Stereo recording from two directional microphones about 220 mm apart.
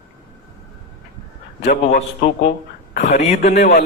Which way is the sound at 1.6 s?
30° left (ahead or behind).